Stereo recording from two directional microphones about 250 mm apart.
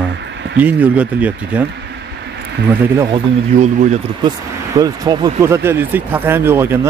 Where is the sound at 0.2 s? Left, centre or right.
Right.